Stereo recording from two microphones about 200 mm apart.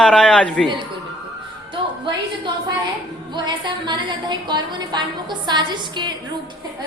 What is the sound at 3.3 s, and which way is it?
A woman's voice, 20° right (ahead or behind).